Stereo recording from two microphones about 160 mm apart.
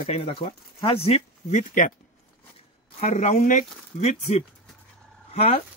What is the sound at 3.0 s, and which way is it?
Speech, 45° left (ahead or behind).